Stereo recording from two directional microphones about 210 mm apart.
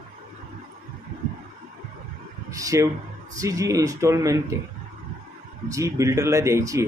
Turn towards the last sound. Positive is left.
turn(degrees=-15)  # may be behind; listen again after turning